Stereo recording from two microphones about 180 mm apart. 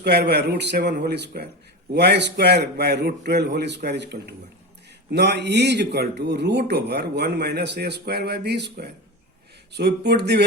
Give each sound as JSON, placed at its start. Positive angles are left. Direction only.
{"t": 0.0, "sound": "a man's voice", "side_deg": -65}